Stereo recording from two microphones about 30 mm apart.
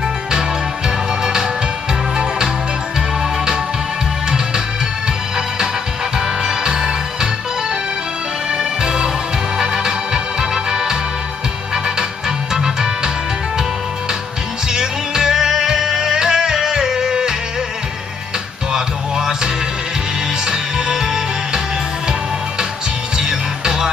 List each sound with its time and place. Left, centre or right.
0.3 s music: right
6.1 s music: centre
8.5 s music: right
14.7 s music: centre
18.7 s music: right
23.1 s music: centre